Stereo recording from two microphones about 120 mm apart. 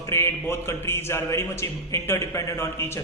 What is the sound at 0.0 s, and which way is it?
A man's voice, 20° left (ahead or behind).